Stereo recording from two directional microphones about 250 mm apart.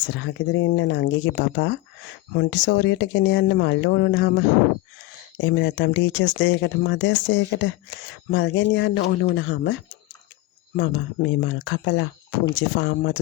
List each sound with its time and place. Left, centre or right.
0.1 s speech: left
10.8 s speech: left